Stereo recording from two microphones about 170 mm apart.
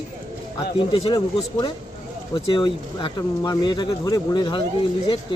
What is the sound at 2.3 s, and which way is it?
Speech, 25° left (ahead or behind).